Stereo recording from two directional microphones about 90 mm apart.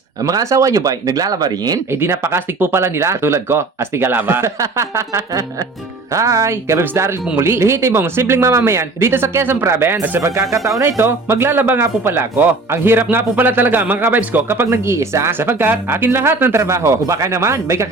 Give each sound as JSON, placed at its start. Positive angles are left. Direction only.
{"t": 0.2, "sound": "speech", "side_deg": -40}
{"t": 1.9, "sound": "speech", "side_deg": -30}